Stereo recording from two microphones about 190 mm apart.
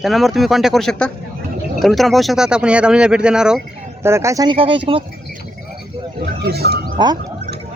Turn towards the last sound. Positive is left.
turn(degrees=-20)  # may be behind; listen again after turning